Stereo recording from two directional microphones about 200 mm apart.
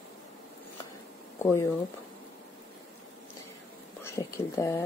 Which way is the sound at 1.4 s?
15° left (ahead or behind).